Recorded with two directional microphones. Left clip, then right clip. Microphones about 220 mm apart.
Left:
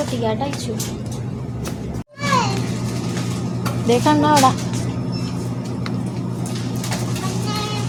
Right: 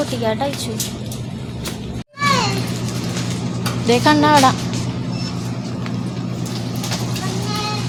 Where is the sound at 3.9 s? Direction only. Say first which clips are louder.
Right 2 dB; 10° right (ahead or behind).